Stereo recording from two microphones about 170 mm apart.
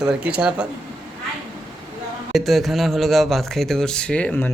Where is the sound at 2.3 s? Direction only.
Centre (ahead or behind).